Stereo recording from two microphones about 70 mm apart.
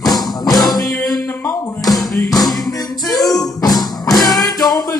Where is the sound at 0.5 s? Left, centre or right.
Left.